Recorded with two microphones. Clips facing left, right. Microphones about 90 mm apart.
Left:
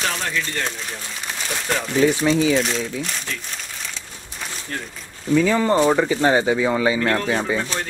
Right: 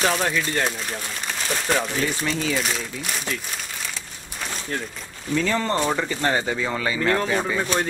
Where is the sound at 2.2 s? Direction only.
10° left (ahead or behind).